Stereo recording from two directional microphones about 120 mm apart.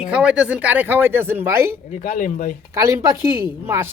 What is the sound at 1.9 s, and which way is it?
Speech, 90° left.